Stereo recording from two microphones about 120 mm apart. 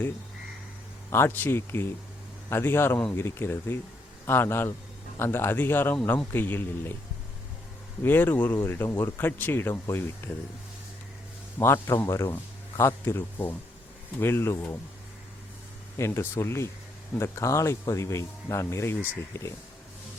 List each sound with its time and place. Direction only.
1.1 s speech: 20° left (ahead or behind)
8.0 s speech: 15° left (ahead or behind)
11.6 s speech: 20° left (ahead or behind)
16.0 s speech: 20° left (ahead or behind)